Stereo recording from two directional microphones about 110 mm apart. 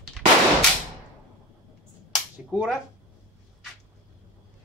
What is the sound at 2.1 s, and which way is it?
Finger snapping, 5° right (ahead or behind).